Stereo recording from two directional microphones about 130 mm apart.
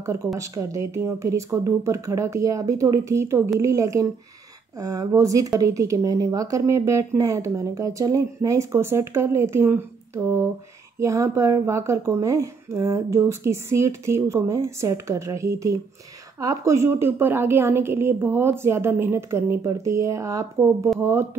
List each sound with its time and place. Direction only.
0.0 s speech: 20° right (ahead or behind)